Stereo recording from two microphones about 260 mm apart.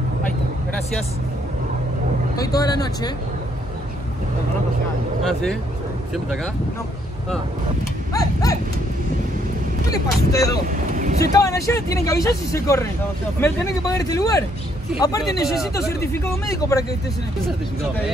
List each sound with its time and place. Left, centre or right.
2.3 s speech: centre
6.1 s speech: centre
8.1 s livestock: centre
9.8 s speech: centre
10.7 s vehicle: right
11.3 s speech: centre